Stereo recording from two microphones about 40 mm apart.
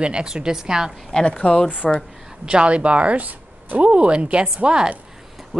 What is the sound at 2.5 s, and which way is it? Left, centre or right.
Speech, right.